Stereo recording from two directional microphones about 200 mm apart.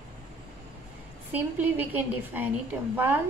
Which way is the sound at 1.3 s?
10° right (ahead or behind).